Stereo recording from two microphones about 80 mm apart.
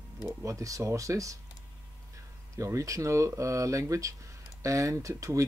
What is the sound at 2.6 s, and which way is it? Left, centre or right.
Speech, right.